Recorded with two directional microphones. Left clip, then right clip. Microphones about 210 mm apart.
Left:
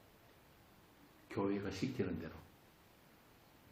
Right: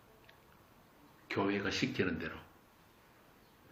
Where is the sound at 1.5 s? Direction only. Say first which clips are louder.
Right 6 dB; 35° right (ahead or behind).